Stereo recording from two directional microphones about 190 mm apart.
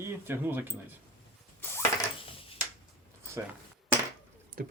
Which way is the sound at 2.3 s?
30° left (ahead or behind).